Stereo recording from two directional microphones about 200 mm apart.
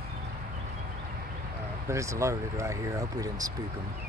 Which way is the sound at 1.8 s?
15° right (ahead or behind).